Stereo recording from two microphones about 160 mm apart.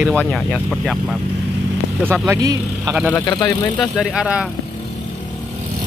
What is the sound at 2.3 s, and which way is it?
Speech, 20° right (ahead or behind).